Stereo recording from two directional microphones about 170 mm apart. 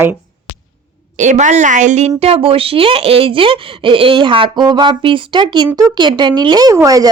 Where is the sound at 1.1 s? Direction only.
45° right (ahead or behind).